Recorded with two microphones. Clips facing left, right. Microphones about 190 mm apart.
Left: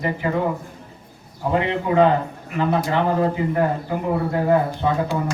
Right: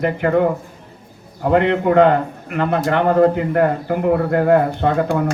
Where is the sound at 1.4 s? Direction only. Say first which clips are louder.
Right 6 dB; 60° right (ahead or behind).